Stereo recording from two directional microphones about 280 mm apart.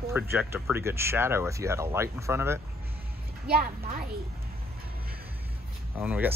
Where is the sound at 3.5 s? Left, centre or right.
Right.